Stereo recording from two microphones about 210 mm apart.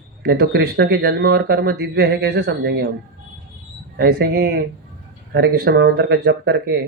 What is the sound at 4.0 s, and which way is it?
Speech, 50° right (ahead or behind).